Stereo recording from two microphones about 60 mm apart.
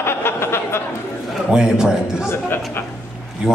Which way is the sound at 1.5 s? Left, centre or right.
Centre.